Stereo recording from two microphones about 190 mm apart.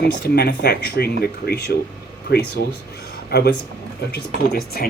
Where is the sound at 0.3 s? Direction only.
60° left (ahead or behind).